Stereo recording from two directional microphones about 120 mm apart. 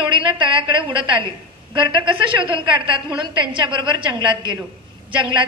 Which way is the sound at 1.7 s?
45° right (ahead or behind).